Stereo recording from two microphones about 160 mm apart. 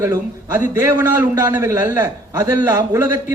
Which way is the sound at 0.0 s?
20° right (ahead or behind).